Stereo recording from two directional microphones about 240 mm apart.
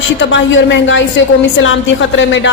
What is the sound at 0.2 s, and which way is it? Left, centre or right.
A woman's voice, left.